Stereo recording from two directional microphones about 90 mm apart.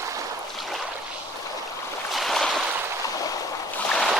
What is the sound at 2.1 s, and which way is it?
Boat, centre (ahead or behind).